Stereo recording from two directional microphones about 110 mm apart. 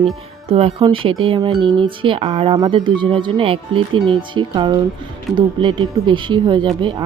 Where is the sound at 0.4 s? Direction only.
60° right (ahead or behind).